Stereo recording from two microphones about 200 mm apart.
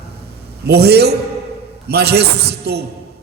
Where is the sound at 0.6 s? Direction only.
55° right (ahead or behind).